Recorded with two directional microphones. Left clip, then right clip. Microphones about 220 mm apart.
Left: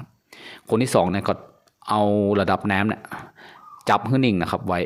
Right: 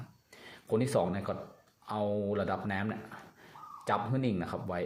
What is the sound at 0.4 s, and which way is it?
Speech, 45° left (ahead or behind).